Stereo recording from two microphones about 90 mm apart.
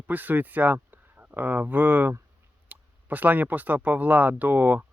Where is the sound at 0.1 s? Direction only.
20° right (ahead or behind).